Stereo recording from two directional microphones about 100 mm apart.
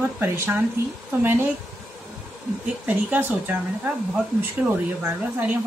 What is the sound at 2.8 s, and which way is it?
Speech, 15° right (ahead or behind).